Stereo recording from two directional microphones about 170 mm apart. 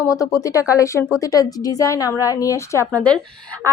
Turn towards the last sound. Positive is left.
turn(degrees=10)  # may be behind; listen again after turning